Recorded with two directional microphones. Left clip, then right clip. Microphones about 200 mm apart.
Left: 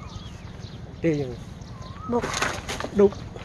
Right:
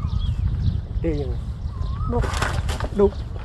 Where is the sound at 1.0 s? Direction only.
45° left (ahead or behind).